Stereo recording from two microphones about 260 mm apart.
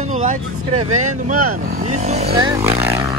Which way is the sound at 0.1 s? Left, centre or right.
Right.